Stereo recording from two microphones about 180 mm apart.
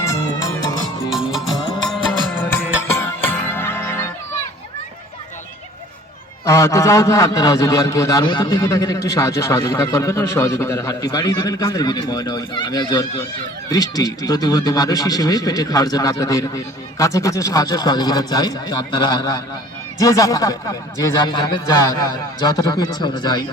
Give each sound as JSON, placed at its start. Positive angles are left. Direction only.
{"t": 0.0, "sound": "music", "side_deg": 15}
{"t": 1.1, "sound": "music", "side_deg": 0}
{"t": 3.5, "sound": "music", "side_deg": 15}
{"t": 6.4, "sound": "a man's voice", "side_deg": 15}